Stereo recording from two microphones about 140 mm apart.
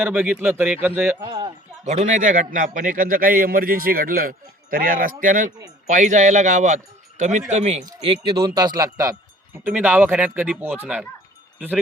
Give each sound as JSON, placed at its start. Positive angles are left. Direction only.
{"t": 0.0, "sound": "speech", "side_deg": -10}
{"t": 1.2, "sound": "a sound", "side_deg": -35}
{"t": 1.8, "sound": "a man's voice", "side_deg": -55}
{"t": 5.2, "sound": "speech", "side_deg": -75}
{"t": 5.5, "sound": "speech", "side_deg": -25}
{"t": 5.9, "sound": "speech", "side_deg": -60}
{"t": 8.0, "sound": "speech", "side_deg": -40}
{"t": 9.6, "sound": "speech", "side_deg": -10}